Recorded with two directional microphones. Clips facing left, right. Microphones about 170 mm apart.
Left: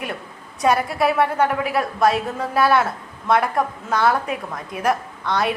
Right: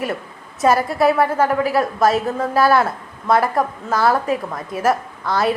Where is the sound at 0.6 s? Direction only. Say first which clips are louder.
Right 3 dB; centre (ahead or behind).